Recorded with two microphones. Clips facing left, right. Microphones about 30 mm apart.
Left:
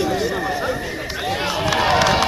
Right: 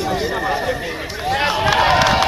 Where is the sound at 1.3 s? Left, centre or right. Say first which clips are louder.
Right 5 dB; centre.